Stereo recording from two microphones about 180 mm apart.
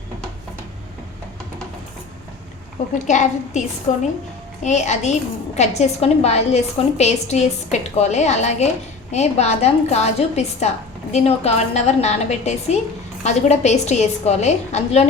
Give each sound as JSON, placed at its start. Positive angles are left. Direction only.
{"t": 3.1, "sound": "a woman's voice", "side_deg": 40}